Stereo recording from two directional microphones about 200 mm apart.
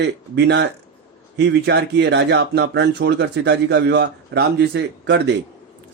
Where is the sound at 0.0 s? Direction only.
55° right (ahead or behind).